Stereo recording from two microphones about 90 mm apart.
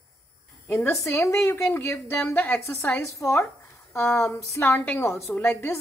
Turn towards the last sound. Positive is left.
turn(degrees=30)  # may be behind; listen again after turning